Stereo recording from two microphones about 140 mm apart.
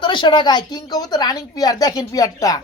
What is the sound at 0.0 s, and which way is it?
Speech, 35° left (ahead or behind).